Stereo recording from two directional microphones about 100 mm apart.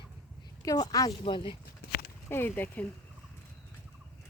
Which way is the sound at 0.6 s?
35° left (ahead or behind).